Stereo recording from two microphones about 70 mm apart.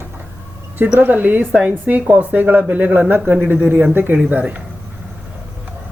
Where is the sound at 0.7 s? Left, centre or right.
Right.